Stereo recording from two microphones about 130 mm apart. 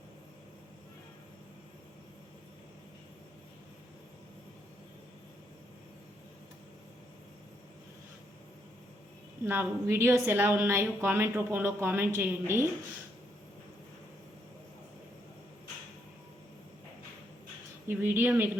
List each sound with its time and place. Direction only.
9.4 s a woman's voice: 15° right (ahead or behind)
17.8 s a woman's voice: 15° right (ahead or behind)